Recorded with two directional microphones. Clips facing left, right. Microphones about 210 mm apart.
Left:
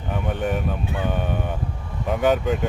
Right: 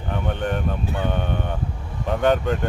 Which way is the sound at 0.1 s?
5° left (ahead or behind).